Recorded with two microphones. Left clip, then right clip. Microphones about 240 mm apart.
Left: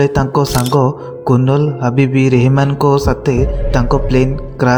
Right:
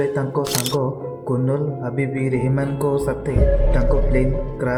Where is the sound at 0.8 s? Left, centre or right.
Left.